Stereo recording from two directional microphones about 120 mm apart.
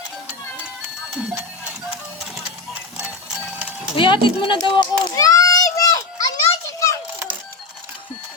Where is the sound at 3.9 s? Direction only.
45° left (ahead or behind); by 7.0 s 25° left (ahead or behind).